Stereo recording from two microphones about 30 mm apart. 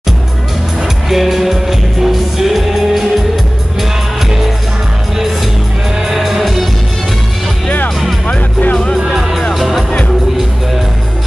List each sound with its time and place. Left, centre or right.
1.0 s music: centre
6.0 s music: centre
9.5 s music: centre